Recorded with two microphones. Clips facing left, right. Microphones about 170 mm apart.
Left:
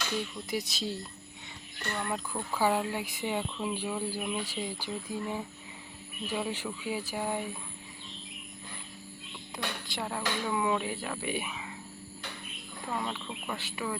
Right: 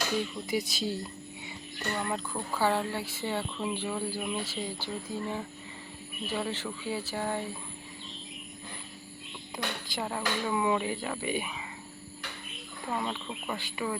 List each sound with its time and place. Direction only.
0.2 s speech: centre (ahead or behind)
9.8 s speech: centre (ahead or behind)
13.0 s speech: 5° right (ahead or behind)